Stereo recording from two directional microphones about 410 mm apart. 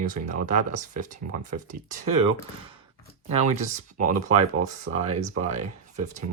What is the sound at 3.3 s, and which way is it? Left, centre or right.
Speech, centre.